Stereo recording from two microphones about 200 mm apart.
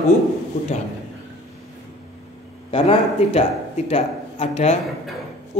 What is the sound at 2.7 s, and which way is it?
A man's voice, 30° left (ahead or behind).